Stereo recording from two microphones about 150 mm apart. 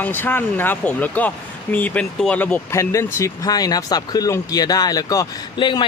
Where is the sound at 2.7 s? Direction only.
20° left (ahead or behind).